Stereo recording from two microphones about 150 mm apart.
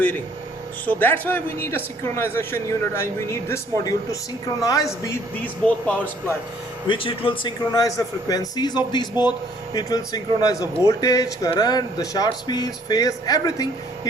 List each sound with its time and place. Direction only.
0.9 s a man's voice: 10° left (ahead or behind)
5.6 s speech: 10° left (ahead or behind)
6.8 s a man's voice: 35° left (ahead or behind)